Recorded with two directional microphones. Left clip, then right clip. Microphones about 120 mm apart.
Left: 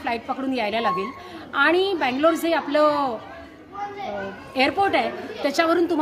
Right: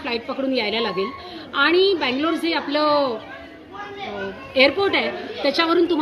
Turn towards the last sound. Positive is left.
turn(degrees=40)  # may be behind; listen again after turning